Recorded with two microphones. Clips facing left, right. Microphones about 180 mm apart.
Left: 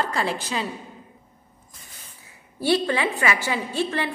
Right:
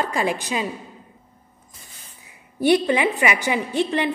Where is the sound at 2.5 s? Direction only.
15° right (ahead or behind).